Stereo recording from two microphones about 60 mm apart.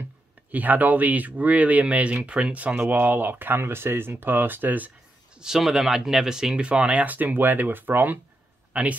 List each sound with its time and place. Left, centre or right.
0.0 s speech: right
2.7 s speech: right
5.4 s speech: centre
7.2 s speech: right